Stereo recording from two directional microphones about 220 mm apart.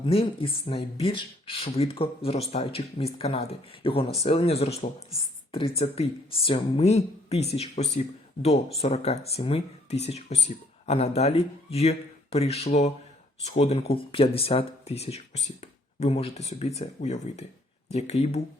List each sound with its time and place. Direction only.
0.0 s speech: 25° left (ahead or behind)